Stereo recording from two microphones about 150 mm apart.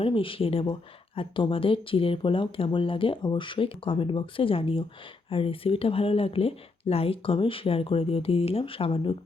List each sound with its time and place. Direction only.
0.0 s speech: 35° left (ahead or behind)